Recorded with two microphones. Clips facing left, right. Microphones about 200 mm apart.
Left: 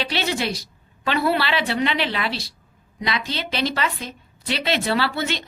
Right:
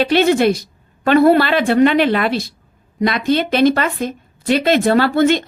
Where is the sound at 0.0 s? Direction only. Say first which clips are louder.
Right 12 dB; 50° right (ahead or behind).